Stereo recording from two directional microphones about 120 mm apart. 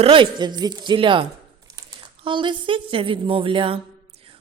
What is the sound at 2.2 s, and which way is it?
Speech, 45° right (ahead or behind).